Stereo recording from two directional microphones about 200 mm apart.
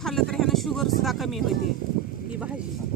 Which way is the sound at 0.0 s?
Centre (ahead or behind).